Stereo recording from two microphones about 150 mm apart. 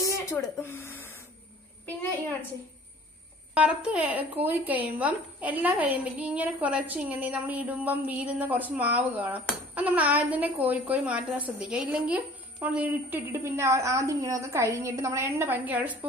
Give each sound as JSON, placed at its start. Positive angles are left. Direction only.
{"t": 0.0, "sound": "speech", "side_deg": 20}
{"t": 3.5, "sound": "a woman's voice", "side_deg": -10}